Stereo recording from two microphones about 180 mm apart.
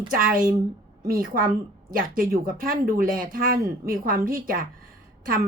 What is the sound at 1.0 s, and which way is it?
A woman's voice, 55° right (ahead or behind).